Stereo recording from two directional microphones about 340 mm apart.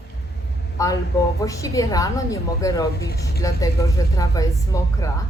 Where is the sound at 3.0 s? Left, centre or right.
Left.